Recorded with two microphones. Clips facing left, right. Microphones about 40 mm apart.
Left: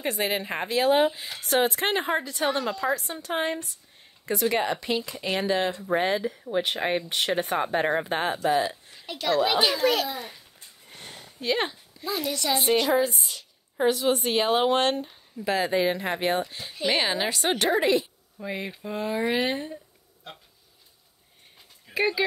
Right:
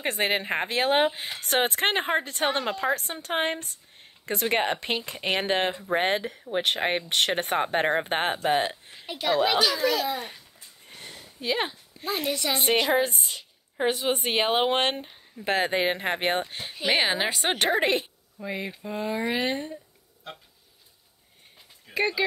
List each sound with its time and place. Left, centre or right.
0.0 s a woman's voice: right
5.9 s a woman's voice: right
9.0 s a woman's voice: centre
10.0 s a woman's voice: right
11.1 s a sound: centre
12.0 s a woman's voice: right
13.3 s speech: right
15.4 s a woman's voice: right
16.7 s speech: centre
17.7 s speech: right
18.4 s speech: centre
21.9 s speech: centre